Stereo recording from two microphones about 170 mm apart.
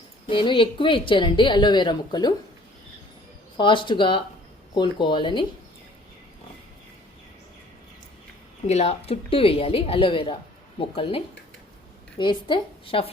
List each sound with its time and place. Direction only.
0.3 s a woman's voice: 30° left (ahead or behind)
3.6 s a woman's voice: 30° left (ahead or behind)
8.6 s a woman's voice: 40° left (ahead or behind)